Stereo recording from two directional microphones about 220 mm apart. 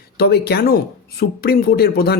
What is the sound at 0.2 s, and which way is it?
Speech, 45° left (ahead or behind).